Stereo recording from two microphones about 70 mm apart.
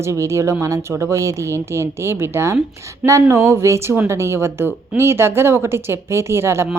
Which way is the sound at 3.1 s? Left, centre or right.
Right.